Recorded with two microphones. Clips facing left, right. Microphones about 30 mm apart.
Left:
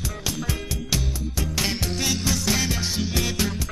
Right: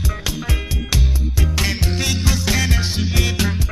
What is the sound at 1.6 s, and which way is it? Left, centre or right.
Music, right.